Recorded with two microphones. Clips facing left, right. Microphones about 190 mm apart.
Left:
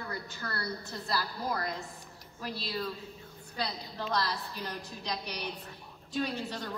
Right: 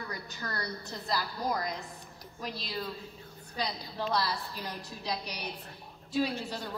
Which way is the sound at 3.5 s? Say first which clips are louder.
Right 1 dB; 10° right (ahead or behind).